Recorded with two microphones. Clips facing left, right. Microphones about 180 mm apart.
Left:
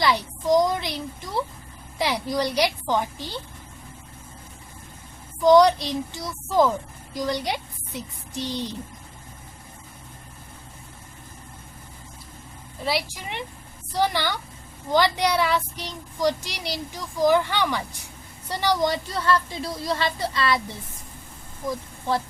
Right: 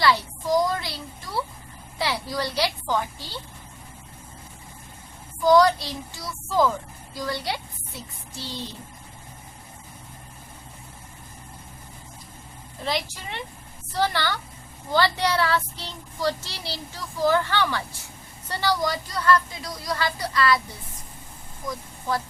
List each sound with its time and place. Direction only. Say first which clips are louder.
0.0 s a woman's voice: even; 20° left (ahead or behind)
5.4 s speech: left 2 dB; 20° left (ahead or behind)
12.8 s speech: left 2 dB; 10° left (ahead or behind); by 20.6 s 25° left (ahead or behind)
21.7 s speech: left 3 dB; 25° left (ahead or behind)